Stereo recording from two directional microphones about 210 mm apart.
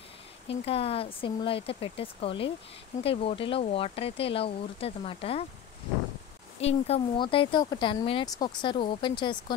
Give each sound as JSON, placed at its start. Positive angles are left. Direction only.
{"t": 0.5, "sound": "speech", "side_deg": 30}
{"t": 6.6, "sound": "speech", "side_deg": 30}